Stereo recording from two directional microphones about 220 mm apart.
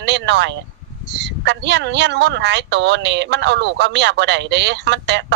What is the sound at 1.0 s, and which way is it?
Speech, 50° right (ahead or behind).